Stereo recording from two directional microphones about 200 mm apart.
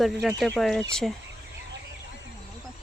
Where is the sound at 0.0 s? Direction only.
Centre (ahead or behind).